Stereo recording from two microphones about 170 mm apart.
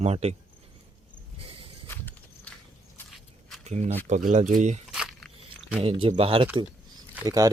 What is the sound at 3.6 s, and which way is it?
Speech, 40° right (ahead or behind).